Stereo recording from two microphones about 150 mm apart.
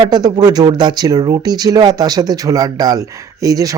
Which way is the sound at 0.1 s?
25° right (ahead or behind).